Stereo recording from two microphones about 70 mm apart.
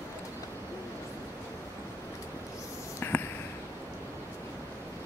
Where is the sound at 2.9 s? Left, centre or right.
Left.